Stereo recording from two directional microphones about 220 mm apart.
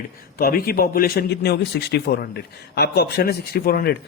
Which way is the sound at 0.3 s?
40° left (ahead or behind).